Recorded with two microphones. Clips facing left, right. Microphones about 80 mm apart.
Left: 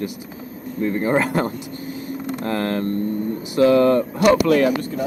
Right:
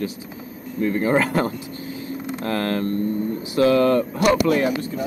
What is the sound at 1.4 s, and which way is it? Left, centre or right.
Vehicle, left.